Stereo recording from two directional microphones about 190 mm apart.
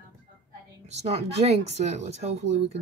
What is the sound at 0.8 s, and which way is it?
Speech, 35° right (ahead or behind).